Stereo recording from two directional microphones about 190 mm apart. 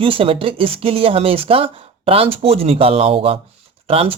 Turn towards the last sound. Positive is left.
turn(degrees=-30)  # may be behind; listen again after turning